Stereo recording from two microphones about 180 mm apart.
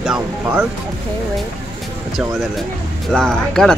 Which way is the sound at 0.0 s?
10° right (ahead or behind).